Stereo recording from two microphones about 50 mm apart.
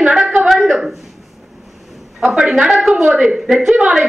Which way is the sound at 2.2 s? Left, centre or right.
Centre.